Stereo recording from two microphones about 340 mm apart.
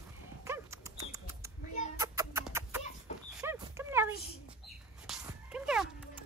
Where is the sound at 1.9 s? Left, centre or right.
Centre.